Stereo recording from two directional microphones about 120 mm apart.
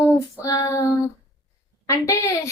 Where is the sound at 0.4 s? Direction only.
30° left (ahead or behind).